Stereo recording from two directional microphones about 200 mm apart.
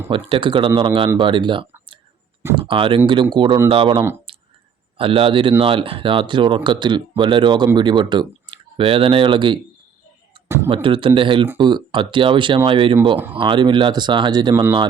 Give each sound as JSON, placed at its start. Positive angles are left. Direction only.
{"t": 0.1, "sound": "speech", "side_deg": -25}
{"t": 2.4, "sound": "speech", "side_deg": -10}
{"t": 2.6, "sound": "speech", "side_deg": -25}
{"t": 4.3, "sound": "clicking", "side_deg": -25}
{"t": 4.9, "sound": "speech", "side_deg": -25}
{"t": 10.8, "sound": "speech", "side_deg": -25}